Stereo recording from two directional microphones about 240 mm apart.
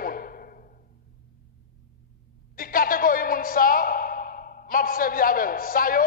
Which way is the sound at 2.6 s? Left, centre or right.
Left.